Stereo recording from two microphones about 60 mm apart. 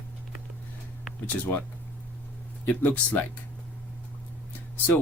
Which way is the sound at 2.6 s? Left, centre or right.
Left.